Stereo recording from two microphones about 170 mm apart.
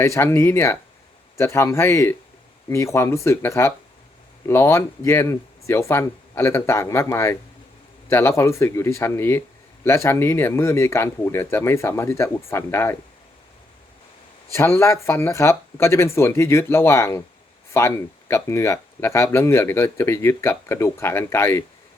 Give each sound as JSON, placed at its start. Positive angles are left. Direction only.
{"t": 0.0, "sound": "speech", "side_deg": 15}
{"t": 14.5, "sound": "speech", "side_deg": 15}